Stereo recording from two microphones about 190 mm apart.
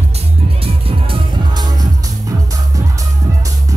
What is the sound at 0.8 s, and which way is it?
Music, 25° right (ahead or behind).